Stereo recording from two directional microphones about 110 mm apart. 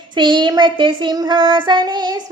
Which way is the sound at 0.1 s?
45° right (ahead or behind).